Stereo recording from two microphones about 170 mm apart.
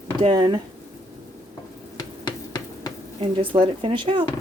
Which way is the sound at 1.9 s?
25° left (ahead or behind).